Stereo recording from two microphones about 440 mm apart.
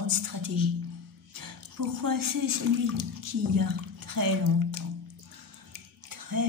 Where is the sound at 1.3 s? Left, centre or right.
Right.